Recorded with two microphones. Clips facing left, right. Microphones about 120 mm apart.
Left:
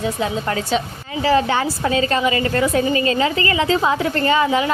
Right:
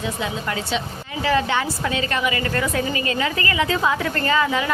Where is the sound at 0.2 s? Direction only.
40° left (ahead or behind).